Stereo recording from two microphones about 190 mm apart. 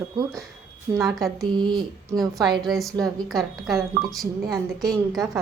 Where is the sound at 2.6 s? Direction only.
Centre (ahead or behind).